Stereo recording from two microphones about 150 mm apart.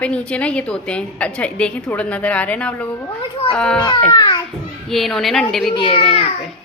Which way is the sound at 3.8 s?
25° left (ahead or behind).